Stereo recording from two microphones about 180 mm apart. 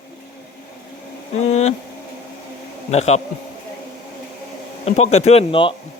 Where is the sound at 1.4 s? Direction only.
40° left (ahead or behind).